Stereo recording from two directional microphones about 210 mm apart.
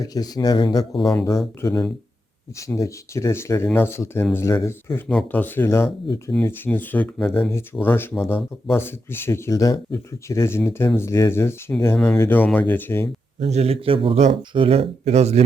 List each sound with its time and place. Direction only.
0.0 s speech: 20° left (ahead or behind)
13.4 s speech: 30° right (ahead or behind)